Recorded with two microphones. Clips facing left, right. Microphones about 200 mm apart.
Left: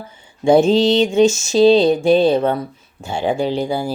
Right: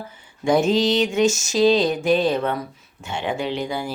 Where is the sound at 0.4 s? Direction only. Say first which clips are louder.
Left 6 dB; 30° left (ahead or behind).